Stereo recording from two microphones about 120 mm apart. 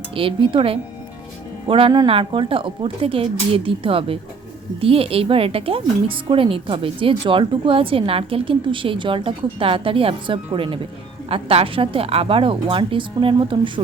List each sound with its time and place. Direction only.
0.1 s speech: 50° right (ahead or behind)